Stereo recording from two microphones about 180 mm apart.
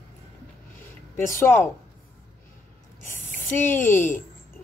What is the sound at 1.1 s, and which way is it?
Speech, 15° left (ahead or behind).